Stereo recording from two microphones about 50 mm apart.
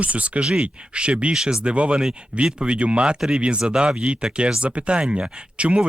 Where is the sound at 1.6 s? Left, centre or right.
Right.